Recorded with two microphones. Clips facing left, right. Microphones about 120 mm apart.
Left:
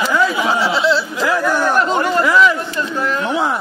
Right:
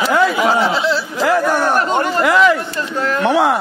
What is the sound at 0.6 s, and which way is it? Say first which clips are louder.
Speech: left 1 dB; 45° right (ahead or behind).